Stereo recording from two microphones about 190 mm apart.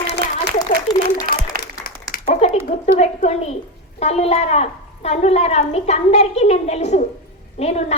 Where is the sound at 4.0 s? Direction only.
35° left (ahead or behind).